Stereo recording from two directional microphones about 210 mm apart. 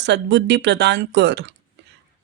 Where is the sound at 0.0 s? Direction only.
55° right (ahead or behind).